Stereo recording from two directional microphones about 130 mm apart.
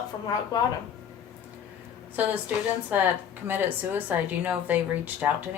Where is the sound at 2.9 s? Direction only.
15° right (ahead or behind).